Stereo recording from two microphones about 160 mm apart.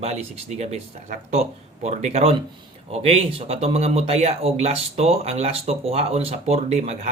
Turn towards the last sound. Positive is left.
turn(degrees=-45)  # may be behind; listen again after turning